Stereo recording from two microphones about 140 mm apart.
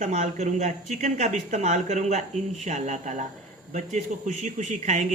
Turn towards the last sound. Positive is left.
turn(degrees=-55)  # may be behind; listen again after turning